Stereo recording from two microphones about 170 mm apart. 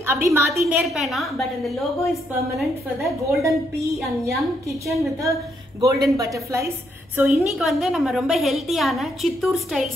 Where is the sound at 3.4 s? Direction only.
20° right (ahead or behind).